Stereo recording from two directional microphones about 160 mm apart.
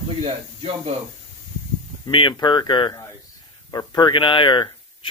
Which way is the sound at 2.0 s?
30° left (ahead or behind).